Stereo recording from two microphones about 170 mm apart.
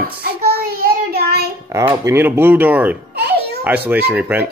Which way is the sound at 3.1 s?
70° right (ahead or behind).